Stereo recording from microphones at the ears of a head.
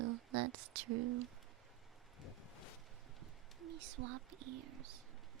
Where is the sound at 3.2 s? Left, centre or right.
Right.